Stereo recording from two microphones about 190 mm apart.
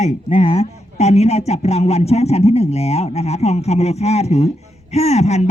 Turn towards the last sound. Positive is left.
turn(degrees=35)  # may be behind; listen again after turning